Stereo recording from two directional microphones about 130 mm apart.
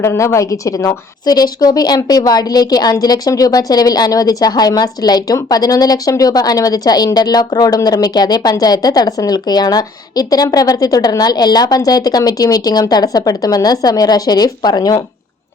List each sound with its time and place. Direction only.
0.0 s a woman's voice: 20° left (ahead or behind)